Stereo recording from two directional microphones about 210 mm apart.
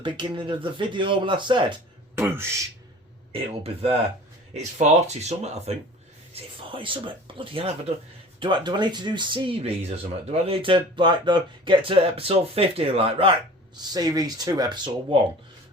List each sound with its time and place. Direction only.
0.0 s speech: 25° right (ahead or behind)
2.2 s speech: 10° right (ahead or behind)
3.6 s speech: 30° right (ahead or behind)